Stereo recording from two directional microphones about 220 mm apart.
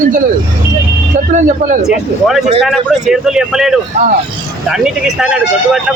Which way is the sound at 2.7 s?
Centre (ahead or behind).